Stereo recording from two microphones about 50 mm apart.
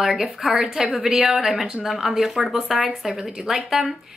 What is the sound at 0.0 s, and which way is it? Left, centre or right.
Speech, centre.